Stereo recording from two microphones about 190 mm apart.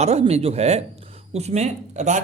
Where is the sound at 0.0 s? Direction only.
35° right (ahead or behind).